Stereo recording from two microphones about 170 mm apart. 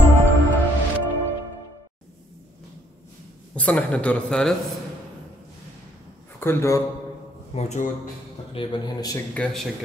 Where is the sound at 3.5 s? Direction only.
10° left (ahead or behind).